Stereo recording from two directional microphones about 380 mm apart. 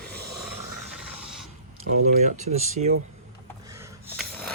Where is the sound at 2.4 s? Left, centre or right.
Centre.